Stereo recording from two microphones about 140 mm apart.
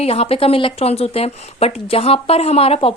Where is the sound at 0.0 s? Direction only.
45° left (ahead or behind).